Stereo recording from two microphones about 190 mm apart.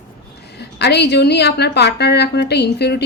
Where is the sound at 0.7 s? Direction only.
60° left (ahead or behind).